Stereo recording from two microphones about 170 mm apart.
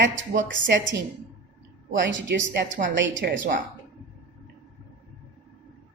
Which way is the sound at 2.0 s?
90° right.